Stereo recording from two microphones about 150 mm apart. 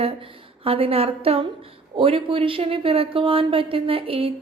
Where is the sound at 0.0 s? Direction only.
40° right (ahead or behind).